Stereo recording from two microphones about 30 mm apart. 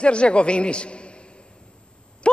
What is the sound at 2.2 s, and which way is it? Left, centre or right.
Owl, left.